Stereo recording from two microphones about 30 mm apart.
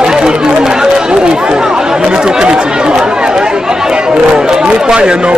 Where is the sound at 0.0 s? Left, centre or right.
Right.